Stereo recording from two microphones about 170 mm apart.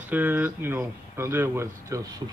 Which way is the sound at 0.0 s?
10° right (ahead or behind).